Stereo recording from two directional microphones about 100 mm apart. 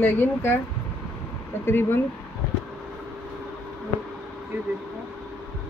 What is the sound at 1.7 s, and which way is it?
Speech, 20° left (ahead or behind).